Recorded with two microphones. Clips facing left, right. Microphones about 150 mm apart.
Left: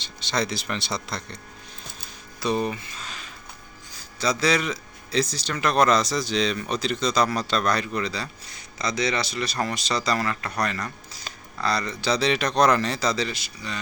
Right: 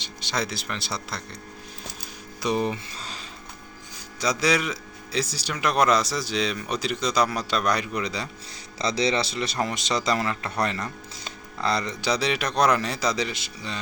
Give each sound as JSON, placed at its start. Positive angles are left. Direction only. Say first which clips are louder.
{"t": 0.0, "sound": "speech", "louder": "left 2 dB", "side_deg": -10}
{"t": 2.4, "sound": "speech", "louder": "even", "side_deg": -15}
{"t": 2.9, "sound": "a sound", "louder": "right 1 dB", "side_deg": -35}
{"t": 4.2, "sound": "speech", "louder": "left 1 dB", "side_deg": -15}
{"t": 8.8, "sound": "speech", "louder": "right 2 dB", "side_deg": -30}